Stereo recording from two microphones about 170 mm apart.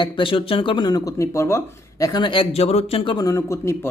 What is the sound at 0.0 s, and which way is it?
Speech, 30° left (ahead or behind).